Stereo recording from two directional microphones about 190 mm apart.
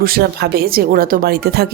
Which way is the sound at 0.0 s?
55° right (ahead or behind).